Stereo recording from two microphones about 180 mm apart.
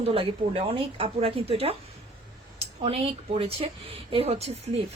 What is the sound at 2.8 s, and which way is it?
Speech, 35° right (ahead or behind).